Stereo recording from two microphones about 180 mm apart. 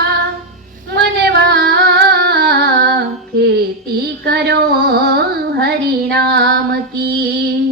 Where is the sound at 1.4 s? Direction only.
65° right (ahead or behind).